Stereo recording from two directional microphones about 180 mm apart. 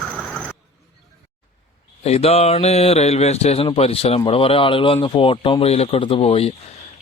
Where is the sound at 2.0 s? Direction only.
35° left (ahead or behind).